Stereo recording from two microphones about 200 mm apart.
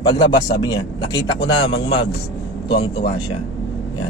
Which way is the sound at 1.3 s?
60° left (ahead or behind).